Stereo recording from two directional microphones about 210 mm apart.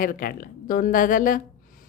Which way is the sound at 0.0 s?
40° left (ahead or behind).